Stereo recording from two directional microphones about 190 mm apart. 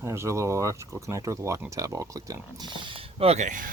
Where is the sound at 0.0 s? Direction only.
15° right (ahead or behind).